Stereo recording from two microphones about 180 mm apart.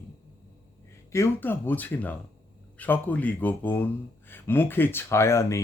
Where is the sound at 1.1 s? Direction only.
15° left (ahead or behind).